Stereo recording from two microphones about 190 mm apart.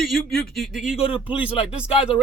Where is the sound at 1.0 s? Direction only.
30° left (ahead or behind).